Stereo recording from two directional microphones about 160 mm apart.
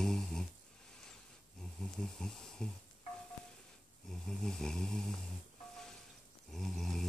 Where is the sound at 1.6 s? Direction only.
5° left (ahead or behind).